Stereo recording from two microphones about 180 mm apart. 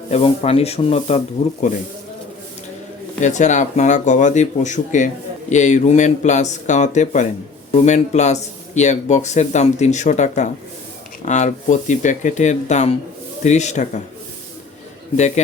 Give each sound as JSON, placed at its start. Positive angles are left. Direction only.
{"t": 0.1, "sound": "speech", "side_deg": 35}
{"t": 3.2, "sound": "speech", "side_deg": 40}